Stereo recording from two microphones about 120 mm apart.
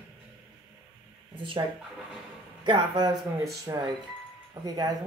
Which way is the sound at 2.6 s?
40° right (ahead or behind).